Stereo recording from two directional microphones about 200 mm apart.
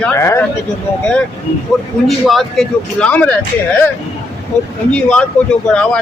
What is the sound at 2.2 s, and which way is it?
Speech, centre (ahead or behind).